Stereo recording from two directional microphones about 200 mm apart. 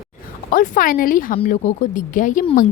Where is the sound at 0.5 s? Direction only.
40° left (ahead or behind).